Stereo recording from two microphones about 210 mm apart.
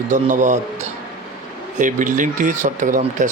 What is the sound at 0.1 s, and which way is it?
Speech, 35° right (ahead or behind).